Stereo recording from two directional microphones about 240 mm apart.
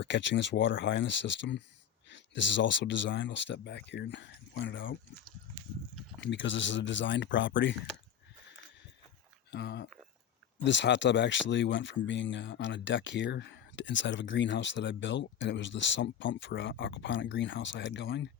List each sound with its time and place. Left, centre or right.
0.0 s speech: left
6.3 s speech: left
9.5 s speech: left